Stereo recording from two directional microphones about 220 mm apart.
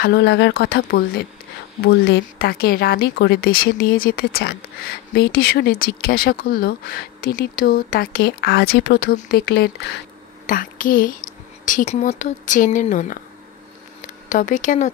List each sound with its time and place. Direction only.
0.0 s speech: 50° left (ahead or behind)
14.3 s speech: 35° left (ahead or behind)